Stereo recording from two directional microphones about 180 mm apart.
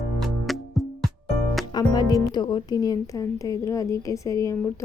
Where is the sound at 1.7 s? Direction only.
20° left (ahead or behind).